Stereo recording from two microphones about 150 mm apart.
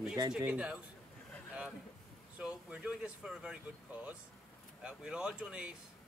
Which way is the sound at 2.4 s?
5° right (ahead or behind).